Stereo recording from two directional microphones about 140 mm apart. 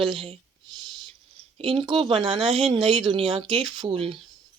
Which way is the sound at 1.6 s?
40° right (ahead or behind).